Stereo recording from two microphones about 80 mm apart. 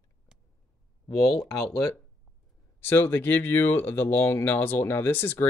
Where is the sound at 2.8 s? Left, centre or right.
Left.